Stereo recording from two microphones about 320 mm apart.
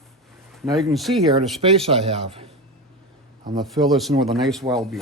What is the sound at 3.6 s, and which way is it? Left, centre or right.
Speech, centre.